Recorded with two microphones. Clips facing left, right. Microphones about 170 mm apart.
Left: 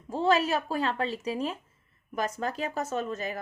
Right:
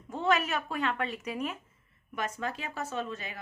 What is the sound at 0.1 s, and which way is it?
A woman's voice, 30° left (ahead or behind).